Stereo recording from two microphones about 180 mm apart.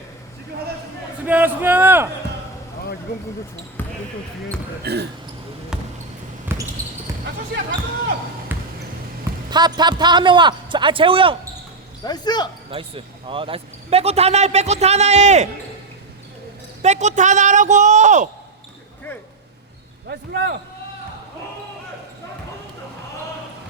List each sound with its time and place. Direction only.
1.2 s a man's voice: 10° right (ahead or behind)
3.8 s basketball bounce: 10° left (ahead or behind)
4.8 s speech: 60° right (ahead or behind)
5.7 s basketball bounce: 5° right (ahead or behind)
8.5 s basketball bounce: 10° right (ahead or behind)
9.5 s a man's voice: 25° right (ahead or behind)
12.0 s speech: 25° left (ahead or behind)
12.7 s a man's voice: 30° right (ahead or behind)
16.8 s a man's voice: 40° right (ahead or behind)
20.1 s speech: 65° right (ahead or behind)